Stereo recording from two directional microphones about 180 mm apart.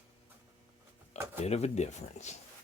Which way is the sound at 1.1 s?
35° left (ahead or behind).